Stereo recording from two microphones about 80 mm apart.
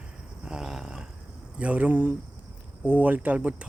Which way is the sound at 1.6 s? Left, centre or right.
Centre.